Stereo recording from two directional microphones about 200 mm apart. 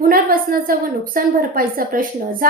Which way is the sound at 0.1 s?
45° right (ahead or behind).